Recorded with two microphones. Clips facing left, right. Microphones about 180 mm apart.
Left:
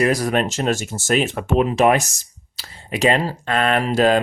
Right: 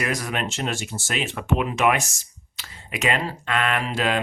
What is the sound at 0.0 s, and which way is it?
Speech, 35° left (ahead or behind).